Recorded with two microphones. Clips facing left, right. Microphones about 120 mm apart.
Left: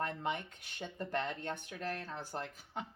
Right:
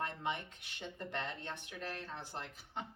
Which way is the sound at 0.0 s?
40° left (ahead or behind).